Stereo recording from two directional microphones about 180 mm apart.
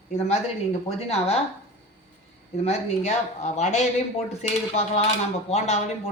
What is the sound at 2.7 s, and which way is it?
A man's voice, 40° left (ahead or behind).